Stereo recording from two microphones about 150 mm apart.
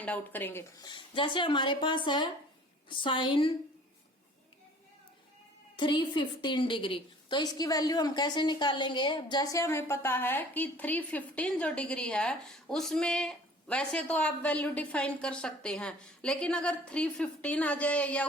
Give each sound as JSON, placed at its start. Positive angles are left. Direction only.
{"t": 0.0, "sound": "a woman's voice", "side_deg": 10}
{"t": 0.8, "sound": "speech", "side_deg": 30}
{"t": 5.7, "sound": "a woman's voice", "side_deg": 30}